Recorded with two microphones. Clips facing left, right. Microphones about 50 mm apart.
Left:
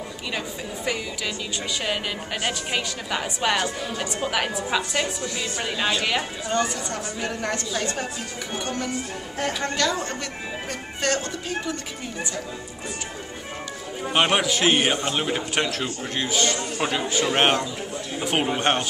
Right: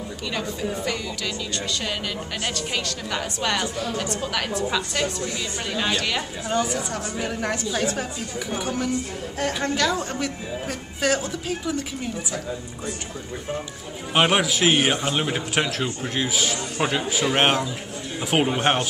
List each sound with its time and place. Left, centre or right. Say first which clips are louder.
0.3 s speech: right 4 dB; centre
6.5 s a man's voice: right 1 dB; centre
14.1 s a man's voice: right 1 dB; centre